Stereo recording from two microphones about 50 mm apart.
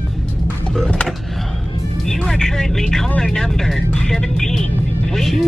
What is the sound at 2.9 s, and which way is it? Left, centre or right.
Speech, centre.